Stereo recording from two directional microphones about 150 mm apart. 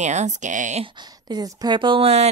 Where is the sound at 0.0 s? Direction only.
50° right (ahead or behind).